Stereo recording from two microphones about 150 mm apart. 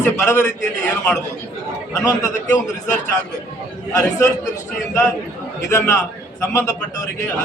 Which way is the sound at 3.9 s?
20° left (ahead or behind).